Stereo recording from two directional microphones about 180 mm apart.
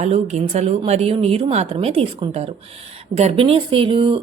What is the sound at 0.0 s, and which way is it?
A woman's voice, 40° right (ahead or behind).